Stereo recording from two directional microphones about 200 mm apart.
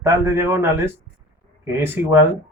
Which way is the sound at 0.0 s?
15° right (ahead or behind).